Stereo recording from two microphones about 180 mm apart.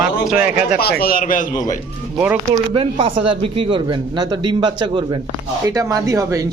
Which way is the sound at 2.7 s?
30° right (ahead or behind).